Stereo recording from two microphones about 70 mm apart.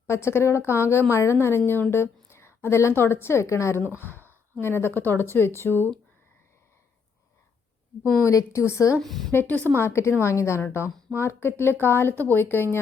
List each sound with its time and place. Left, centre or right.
0.1 s a woman's voice: left
4.3 s a woman's voice: left
8.2 s speech: left
9.0 s a woman's voice: centre
9.6 s a woman's voice: left